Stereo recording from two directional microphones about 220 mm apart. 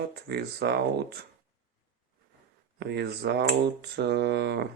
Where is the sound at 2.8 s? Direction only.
50° right (ahead or behind).